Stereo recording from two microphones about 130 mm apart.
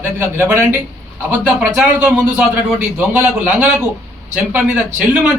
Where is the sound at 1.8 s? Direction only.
10° right (ahead or behind).